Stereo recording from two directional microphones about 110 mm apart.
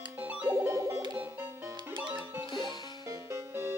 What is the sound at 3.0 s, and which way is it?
Music, 25° right (ahead or behind).